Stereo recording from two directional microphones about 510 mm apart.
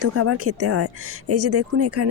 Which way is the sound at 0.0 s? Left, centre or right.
Right.